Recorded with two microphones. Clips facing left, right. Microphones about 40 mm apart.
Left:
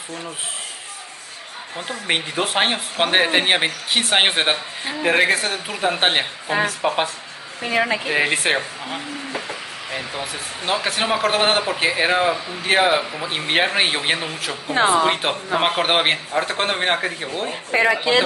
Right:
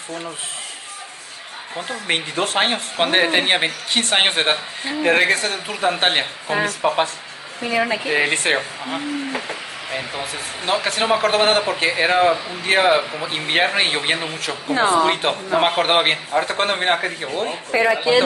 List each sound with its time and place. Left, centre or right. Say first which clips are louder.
1.8 s speech: even; centre
8.1 s speech: right 3 dB; centre
17.6 s speech: even; left